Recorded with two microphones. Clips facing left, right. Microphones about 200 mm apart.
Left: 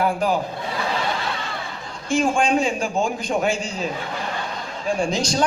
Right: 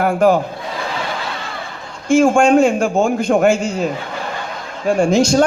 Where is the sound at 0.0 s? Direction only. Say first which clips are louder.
Right 7 dB; 50° right (ahead or behind).